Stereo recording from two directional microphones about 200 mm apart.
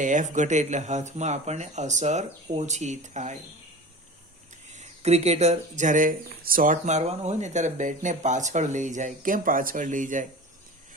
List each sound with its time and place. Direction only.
0.0 s speech: 40° right (ahead or behind)
4.7 s speech: 35° right (ahead or behind)